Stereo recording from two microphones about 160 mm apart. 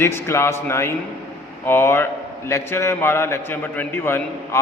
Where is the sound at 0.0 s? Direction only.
15° left (ahead or behind).